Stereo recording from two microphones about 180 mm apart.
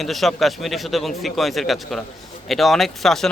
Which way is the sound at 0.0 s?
Centre (ahead or behind).